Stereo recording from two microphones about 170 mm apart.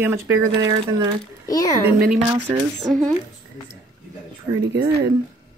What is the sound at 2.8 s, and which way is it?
Speech, 5° left (ahead or behind).